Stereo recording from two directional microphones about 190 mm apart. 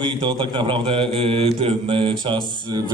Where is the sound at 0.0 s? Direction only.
25° right (ahead or behind).